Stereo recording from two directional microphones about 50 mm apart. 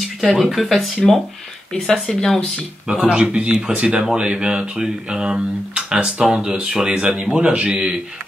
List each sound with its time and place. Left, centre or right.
0.2 s speech: centre
1.7 s speech: centre
2.9 s speech: centre
6.9 s speech: right